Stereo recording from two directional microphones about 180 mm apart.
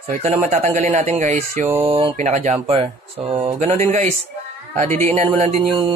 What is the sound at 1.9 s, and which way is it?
Speech, 30° right (ahead or behind).